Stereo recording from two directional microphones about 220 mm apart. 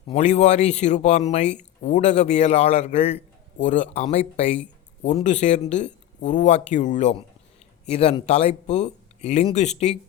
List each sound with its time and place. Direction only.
0.1 s speech: 30° left (ahead or behind)